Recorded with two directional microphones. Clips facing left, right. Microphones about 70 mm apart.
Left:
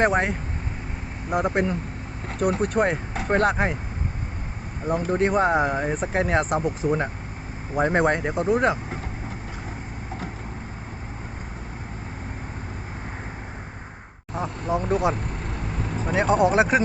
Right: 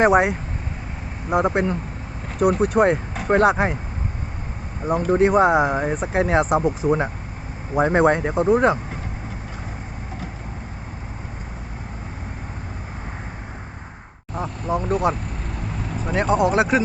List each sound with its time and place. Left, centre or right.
0.0 s speech: centre
4.9 s speech: centre
6.8 s speech: right
7.8 s speech: centre
14.7 s speech: left